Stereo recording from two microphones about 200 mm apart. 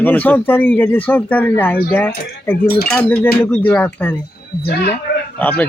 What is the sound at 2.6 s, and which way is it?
Speech, 50° left (ahead or behind).